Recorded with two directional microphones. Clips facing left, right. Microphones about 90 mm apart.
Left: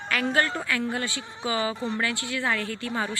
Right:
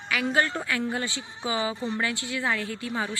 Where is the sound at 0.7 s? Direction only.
20° right (ahead or behind).